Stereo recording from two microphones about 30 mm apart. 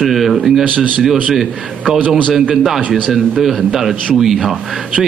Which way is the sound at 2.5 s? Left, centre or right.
Centre.